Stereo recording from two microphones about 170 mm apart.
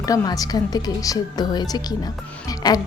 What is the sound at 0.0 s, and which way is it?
A woman's voice, 20° left (ahead or behind).